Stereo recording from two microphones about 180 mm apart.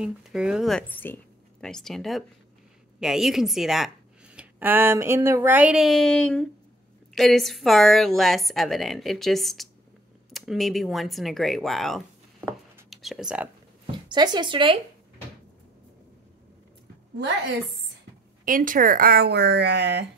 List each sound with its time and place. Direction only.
0.0 s a woman's voice: 5° right (ahead or behind)
14.0 s speech: 25° right (ahead or behind)
18.4 s speech: 50° right (ahead or behind); by 20.1 s 70° right (ahead or behind)